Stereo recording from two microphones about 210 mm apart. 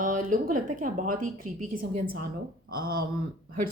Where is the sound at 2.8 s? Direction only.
45° right (ahead or behind).